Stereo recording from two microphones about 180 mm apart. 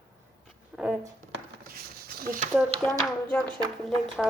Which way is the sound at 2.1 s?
55° right (ahead or behind).